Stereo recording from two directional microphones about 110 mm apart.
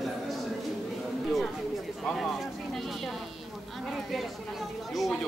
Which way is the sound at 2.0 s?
Centre (ahead or behind).